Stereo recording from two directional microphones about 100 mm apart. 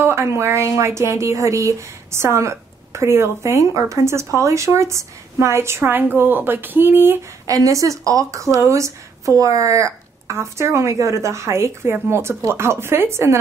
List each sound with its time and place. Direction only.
0.0 s a woman's voice: 25° right (ahead or behind)
7.4 s a woman's voice: 35° right (ahead or behind)